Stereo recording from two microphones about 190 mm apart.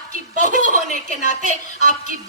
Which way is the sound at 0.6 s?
45° right (ahead or behind).